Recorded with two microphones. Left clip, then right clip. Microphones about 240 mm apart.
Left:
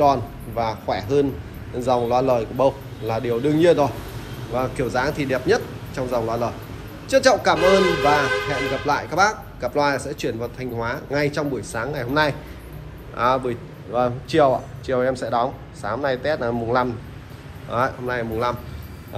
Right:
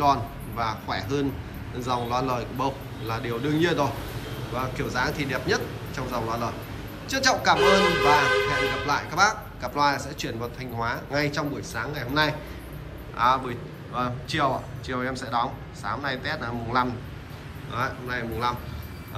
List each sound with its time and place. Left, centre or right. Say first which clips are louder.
0.0 s a man's voice: left 5 dB; centre